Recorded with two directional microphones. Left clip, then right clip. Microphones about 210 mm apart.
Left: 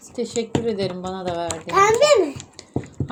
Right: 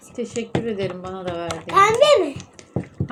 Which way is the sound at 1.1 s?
35° left (ahead or behind).